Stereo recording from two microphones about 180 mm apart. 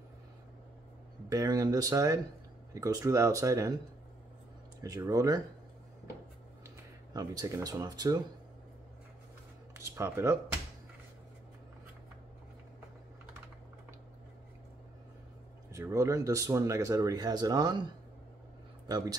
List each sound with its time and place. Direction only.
1.3 s speech: 20° right (ahead or behind)
4.8 s speech: 20° right (ahead or behind)
7.2 s speech: 20° right (ahead or behind)
9.8 s speech: 15° right (ahead or behind)
15.7 s speech: 15° right (ahead or behind)
18.9 s speech: 25° right (ahead or behind)